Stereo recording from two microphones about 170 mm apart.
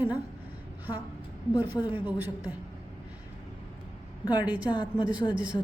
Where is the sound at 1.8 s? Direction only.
10° right (ahead or behind).